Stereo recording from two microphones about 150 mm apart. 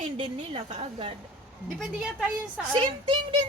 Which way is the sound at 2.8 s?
35° right (ahead or behind).